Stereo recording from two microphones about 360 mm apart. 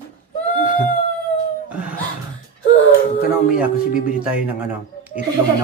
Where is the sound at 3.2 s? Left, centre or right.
Left.